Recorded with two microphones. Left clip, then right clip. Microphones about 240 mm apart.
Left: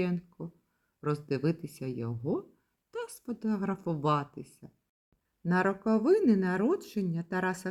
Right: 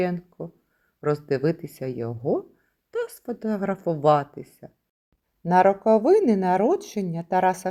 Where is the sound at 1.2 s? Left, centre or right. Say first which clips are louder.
Right 8 dB; centre.